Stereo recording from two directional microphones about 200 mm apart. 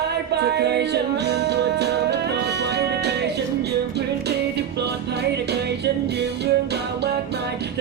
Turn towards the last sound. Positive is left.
turn(degrees=-55)  # may be behind; listen again after turning